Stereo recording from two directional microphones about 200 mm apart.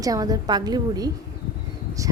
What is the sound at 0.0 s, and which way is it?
A woman's voice, 20° right (ahead or behind).